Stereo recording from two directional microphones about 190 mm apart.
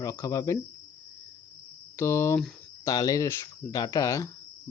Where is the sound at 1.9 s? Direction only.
15° left (ahead or behind).